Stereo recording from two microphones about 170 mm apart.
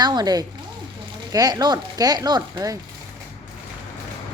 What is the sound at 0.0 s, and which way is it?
Speech, 25° right (ahead or behind).